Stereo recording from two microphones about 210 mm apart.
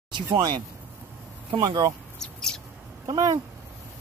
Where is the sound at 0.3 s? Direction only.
20° right (ahead or behind).